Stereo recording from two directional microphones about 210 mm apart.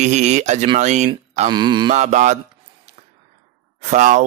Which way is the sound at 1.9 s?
35° right (ahead or behind).